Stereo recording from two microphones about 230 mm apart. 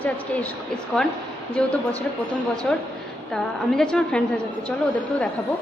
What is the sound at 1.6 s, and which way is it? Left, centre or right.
A woman's voice, centre.